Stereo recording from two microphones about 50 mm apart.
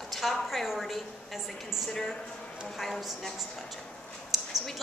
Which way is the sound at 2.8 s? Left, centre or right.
Centre.